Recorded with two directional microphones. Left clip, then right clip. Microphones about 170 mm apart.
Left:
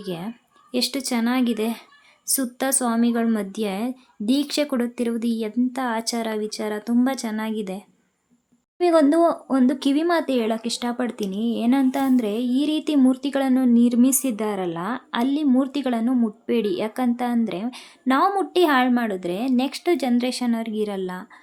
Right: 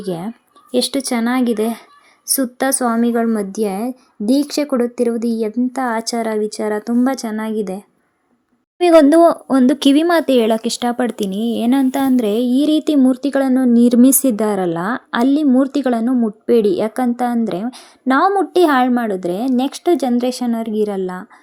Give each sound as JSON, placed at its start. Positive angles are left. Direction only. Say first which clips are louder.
{"t": 0.0, "sound": "a woman's voice", "louder": "right 7 dB", "side_deg": -20}
{"t": 3.3, "sound": "speech", "louder": "right 7 dB", "side_deg": 5}
{"t": 5.5, "sound": "a woman's voice", "louder": "right 5 dB", "side_deg": -10}
{"t": 8.8, "sound": "a woman's voice", "louder": "right 8 dB", "side_deg": -40}